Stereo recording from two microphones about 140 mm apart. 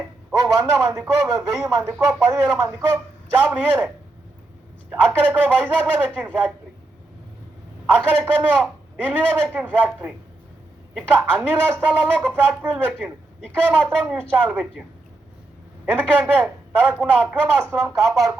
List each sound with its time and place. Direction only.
0.6 s speech: 20° right (ahead or behind)
3.4 s a man's voice: 10° right (ahead or behind)
4.9 s a man's voice: 10° right (ahead or behind)
7.9 s a man's voice: 10° right (ahead or behind)
13.7 s speech: 10° left (ahead or behind)
14.3 s a man's voice: 10° right (ahead or behind)
15.9 s a man's voice: 10° right (ahead or behind)
17.8 s speech: centre (ahead or behind)